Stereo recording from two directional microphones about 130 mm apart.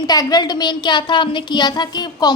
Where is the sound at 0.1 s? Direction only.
30° left (ahead or behind).